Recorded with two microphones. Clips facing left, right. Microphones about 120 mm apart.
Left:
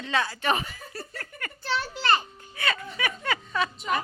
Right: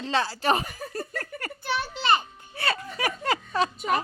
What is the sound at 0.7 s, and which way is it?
Laughter, 45° right (ahead or behind).